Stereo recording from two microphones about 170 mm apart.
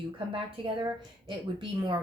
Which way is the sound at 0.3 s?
30° right (ahead or behind).